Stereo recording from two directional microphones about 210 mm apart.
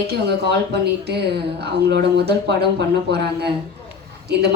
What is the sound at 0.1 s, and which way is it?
Speech, 50° right (ahead or behind).